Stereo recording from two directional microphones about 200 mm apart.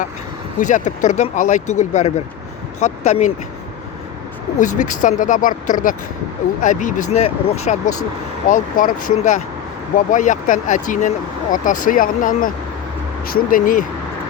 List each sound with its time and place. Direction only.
0.6 s speech: 40° left (ahead or behind)
4.5 s speech: 40° left (ahead or behind)